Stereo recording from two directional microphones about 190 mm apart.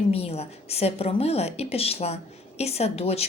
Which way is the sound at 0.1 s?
30° left (ahead or behind).